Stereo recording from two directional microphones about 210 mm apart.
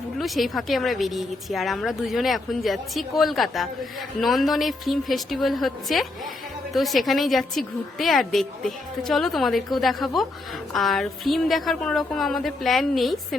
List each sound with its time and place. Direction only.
0.2 s a woman's voice: centre (ahead or behind)